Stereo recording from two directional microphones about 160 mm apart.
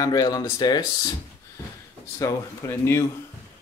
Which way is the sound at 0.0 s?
25° left (ahead or behind).